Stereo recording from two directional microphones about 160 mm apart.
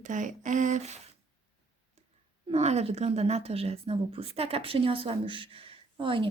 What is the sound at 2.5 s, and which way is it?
A woman's voice, 45° right (ahead or behind).